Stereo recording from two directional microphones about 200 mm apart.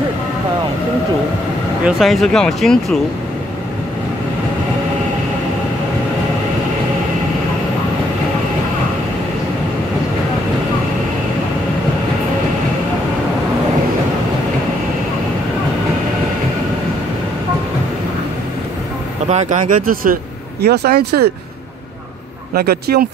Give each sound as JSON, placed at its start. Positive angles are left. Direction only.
{"t": 1.9, "sound": "speech", "side_deg": 0}
{"t": 19.2, "sound": "speech", "side_deg": -35}
{"t": 22.6, "sound": "speech", "side_deg": -50}